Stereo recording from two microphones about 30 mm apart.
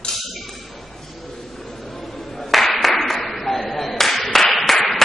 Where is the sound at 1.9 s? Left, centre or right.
Centre.